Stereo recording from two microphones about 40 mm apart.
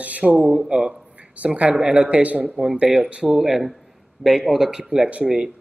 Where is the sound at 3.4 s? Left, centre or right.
Centre.